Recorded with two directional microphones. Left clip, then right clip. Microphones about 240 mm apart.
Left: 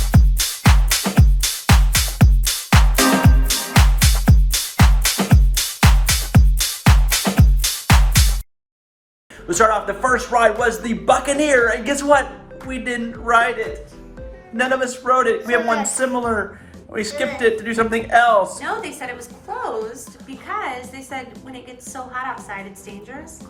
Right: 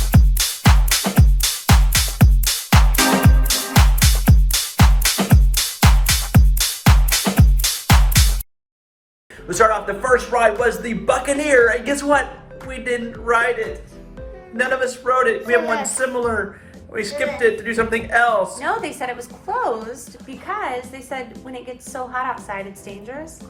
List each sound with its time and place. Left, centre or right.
0.0 s music: centre
9.5 s a woman's voice: centre
18.6 s a woman's voice: centre
20.5 s a woman's voice: centre